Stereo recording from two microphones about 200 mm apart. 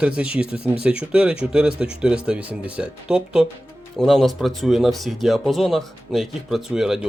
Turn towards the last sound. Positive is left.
turn(degrees=-5)  # may be behind; listen again after turning